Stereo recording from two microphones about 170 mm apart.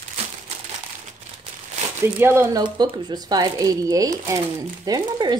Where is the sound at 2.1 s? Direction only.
15° right (ahead or behind).